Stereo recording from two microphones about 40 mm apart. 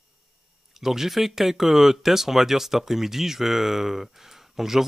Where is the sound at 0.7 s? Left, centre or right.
Centre.